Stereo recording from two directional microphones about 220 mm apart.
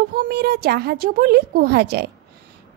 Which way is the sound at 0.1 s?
40° right (ahead or behind).